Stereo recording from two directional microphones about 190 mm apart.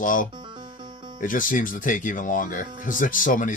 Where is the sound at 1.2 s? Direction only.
45° left (ahead or behind).